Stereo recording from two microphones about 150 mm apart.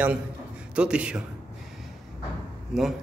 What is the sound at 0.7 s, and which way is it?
Speech, 5° right (ahead or behind).